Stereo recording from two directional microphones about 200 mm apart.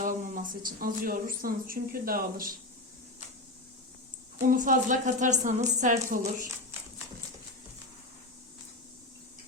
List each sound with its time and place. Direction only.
0.0 s speech: 45° right (ahead or behind)
4.4 s speech: 40° right (ahead or behind)